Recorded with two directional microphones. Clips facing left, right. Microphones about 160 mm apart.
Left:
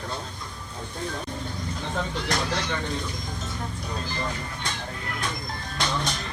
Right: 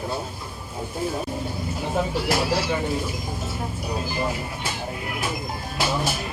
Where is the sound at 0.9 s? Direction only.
5° right (ahead or behind).